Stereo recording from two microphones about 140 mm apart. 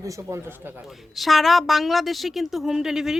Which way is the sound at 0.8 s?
Centre (ahead or behind).